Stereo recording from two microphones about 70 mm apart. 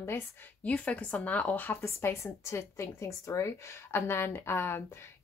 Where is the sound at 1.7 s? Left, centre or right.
Left.